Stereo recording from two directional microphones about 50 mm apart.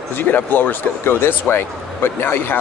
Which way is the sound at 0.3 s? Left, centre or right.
Left.